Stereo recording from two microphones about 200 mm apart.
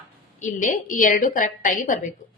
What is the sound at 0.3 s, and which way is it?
A woman's voice, 40° left (ahead or behind).